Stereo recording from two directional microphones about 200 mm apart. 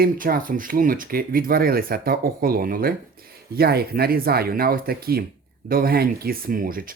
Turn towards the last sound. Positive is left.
turn(degrees=-45)  # may be behind; listen again after turning